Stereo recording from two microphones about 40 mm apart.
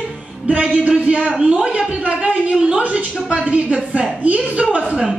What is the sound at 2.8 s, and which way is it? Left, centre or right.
A woman's voice, right.